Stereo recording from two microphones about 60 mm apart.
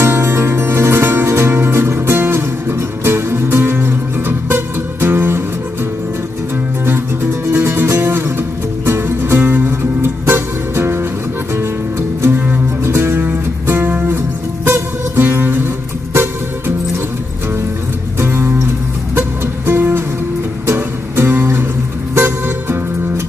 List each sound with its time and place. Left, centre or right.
0.0 s music: right
7.4 s music: right
12.2 s music: right
12.8 s music: right
18.2 s music: right